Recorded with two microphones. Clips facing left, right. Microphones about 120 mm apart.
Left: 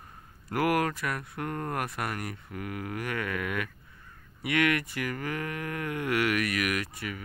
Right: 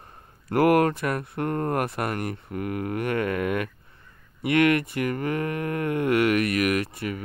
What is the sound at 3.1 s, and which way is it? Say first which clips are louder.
Speech: right 7 dB; 40° right (ahead or behind).